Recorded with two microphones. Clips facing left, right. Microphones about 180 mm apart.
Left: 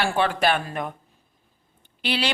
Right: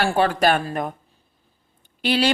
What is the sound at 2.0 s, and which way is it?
Speech, 45° right (ahead or behind).